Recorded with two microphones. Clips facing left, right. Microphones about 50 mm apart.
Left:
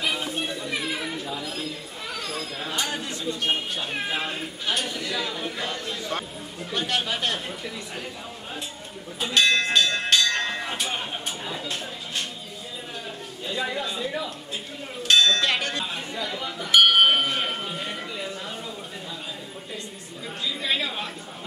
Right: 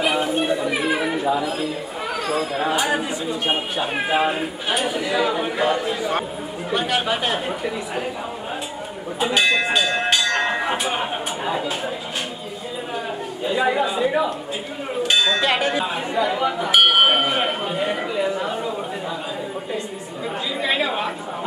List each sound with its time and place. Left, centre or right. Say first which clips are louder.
0.0 s chatter: right 8 dB; right
2.7 s speech: right 8 dB; centre
9.2 s bell: right 3 dB; centre
13.4 s speech: right 9 dB; centre
16.7 s a sound: right 1 dB; centre
20.6 s chatter: right 7 dB; centre